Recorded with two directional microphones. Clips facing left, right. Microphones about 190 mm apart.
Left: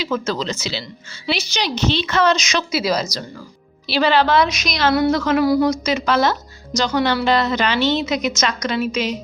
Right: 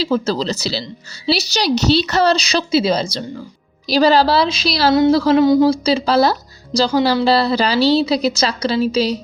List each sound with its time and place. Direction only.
0.0 s a woman's voice: 35° right (ahead or behind)
3.8 s a woman's voice: 40° right (ahead or behind)